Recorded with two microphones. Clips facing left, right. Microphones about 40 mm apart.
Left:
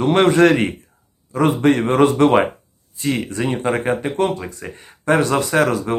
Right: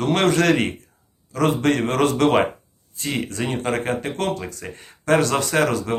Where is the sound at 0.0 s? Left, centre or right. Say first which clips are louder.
Left 5 dB; left.